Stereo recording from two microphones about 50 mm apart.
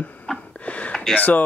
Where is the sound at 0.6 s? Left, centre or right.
Left.